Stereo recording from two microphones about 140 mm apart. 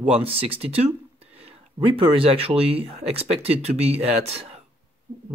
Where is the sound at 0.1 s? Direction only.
45° right (ahead or behind).